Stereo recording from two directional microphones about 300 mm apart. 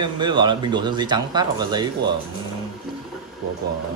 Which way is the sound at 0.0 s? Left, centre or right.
Centre.